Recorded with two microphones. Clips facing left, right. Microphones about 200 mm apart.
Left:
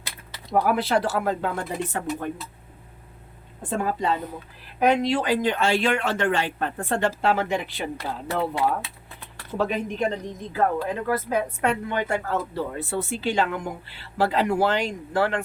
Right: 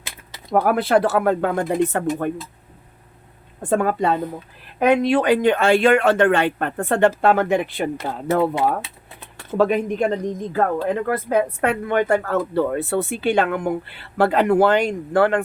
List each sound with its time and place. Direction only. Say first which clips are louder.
0.5 s speech: right 5 dB; 55° right (ahead or behind)
3.6 s speech: right 6 dB; 60° right (ahead or behind)